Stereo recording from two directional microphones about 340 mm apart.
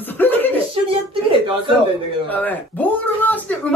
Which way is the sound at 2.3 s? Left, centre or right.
Centre.